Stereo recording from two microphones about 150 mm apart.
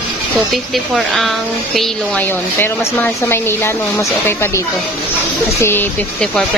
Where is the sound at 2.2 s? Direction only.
15° left (ahead or behind).